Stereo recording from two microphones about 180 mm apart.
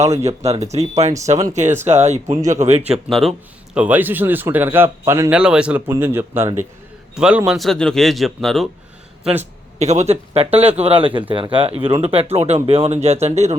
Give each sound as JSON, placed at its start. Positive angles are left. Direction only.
{"t": 0.0, "sound": "speech", "side_deg": -15}
{"t": 0.3, "sound": "speech", "side_deg": -35}
{"t": 1.6, "sound": "speech", "side_deg": -15}
{"t": 1.9, "sound": "speech", "side_deg": -40}
{"t": 2.9, "sound": "a man's voice", "side_deg": 0}
{"t": 9.2, "sound": "speech", "side_deg": -10}
{"t": 9.7, "sound": "speech", "side_deg": -40}